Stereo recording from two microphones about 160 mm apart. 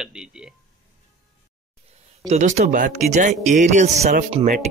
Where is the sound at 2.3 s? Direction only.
45° right (ahead or behind).